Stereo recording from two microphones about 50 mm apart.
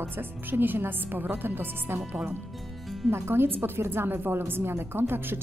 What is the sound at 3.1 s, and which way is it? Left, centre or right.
A woman's voice, right.